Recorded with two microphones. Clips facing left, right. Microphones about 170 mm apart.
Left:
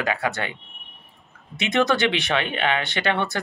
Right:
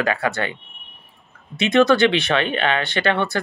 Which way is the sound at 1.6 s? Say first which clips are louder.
Right 6 dB; 20° left (ahead or behind).